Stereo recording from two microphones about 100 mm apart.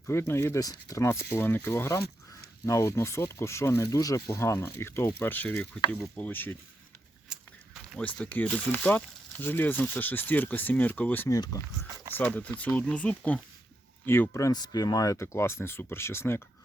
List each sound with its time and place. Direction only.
0.1 s speech: 25° left (ahead or behind)
0.6 s speech: 35° left (ahead or behind)
1.0 s speech: 25° left (ahead or behind)
7.3 s walk: 5° right (ahead or behind)
7.9 s speech: 10° left (ahead or behind)
11.3 s speech: 35° left (ahead or behind)
12.1 s speech: 15° left (ahead or behind)